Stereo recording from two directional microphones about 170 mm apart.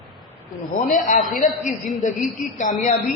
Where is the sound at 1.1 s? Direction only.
50° left (ahead or behind).